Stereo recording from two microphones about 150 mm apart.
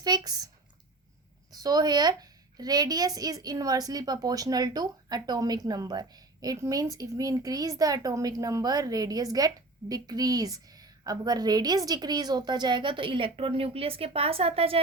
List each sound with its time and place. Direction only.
0.0 s speech: 25° right (ahead or behind)
1.5 s speech: 25° right (ahead or behind)